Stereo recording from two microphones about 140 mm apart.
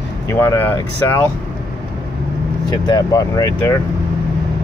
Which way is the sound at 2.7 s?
25° left (ahead or behind).